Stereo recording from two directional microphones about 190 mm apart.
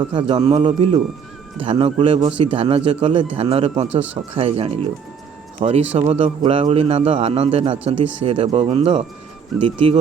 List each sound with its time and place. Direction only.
0.0 s a man's voice: 25° right (ahead or behind)